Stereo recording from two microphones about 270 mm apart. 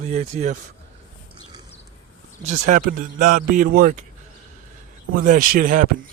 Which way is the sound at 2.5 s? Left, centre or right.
Right.